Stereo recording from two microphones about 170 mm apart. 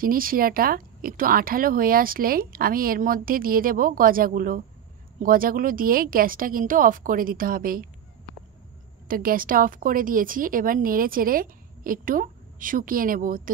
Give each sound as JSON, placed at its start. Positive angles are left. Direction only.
{"t": 0.0, "sound": "speech", "side_deg": -55}
{"t": 9.0, "sound": "speech", "side_deg": -55}